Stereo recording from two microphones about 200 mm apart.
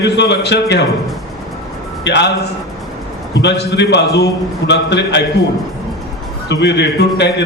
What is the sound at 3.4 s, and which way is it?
A man's voice, 60° left (ahead or behind).